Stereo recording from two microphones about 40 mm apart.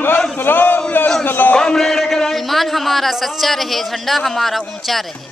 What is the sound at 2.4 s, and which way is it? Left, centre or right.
A man's voice, centre.